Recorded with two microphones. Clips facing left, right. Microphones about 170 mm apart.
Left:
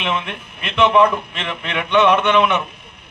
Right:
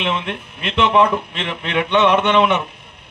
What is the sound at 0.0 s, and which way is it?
Speech, 30° right (ahead or behind).